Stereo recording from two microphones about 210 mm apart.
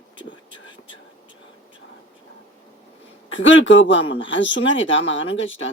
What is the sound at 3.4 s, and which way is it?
Speech, 65° left (ahead or behind).